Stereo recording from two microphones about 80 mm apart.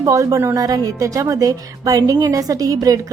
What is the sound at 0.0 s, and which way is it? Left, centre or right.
A woman's voice, right.